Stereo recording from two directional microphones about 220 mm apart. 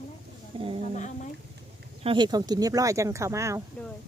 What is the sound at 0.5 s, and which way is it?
Speech, 25° right (ahead or behind).